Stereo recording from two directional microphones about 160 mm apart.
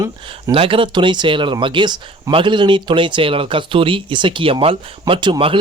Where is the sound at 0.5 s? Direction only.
35° right (ahead or behind).